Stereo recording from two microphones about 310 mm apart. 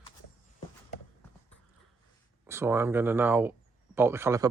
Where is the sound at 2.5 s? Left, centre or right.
Centre.